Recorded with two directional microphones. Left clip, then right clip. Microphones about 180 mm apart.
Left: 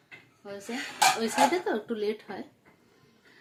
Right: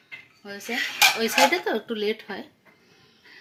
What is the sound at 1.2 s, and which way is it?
Speech, 25° right (ahead or behind).